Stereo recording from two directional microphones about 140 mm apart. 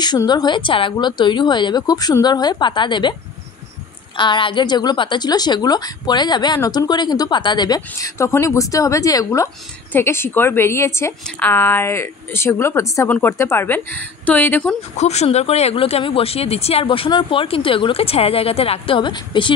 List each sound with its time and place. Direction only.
0.0 s speech: 30° left (ahead or behind)
4.2 s a woman's voice: 35° left (ahead or behind); by 14.8 s 10° left (ahead or behind)
15.0 s speech: 50° left (ahead or behind); by 19.5 s 35° left (ahead or behind)